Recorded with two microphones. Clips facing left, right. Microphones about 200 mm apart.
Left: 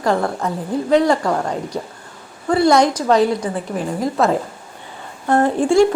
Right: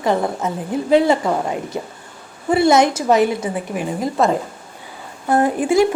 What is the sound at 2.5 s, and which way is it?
A woman's voice, 20° right (ahead or behind).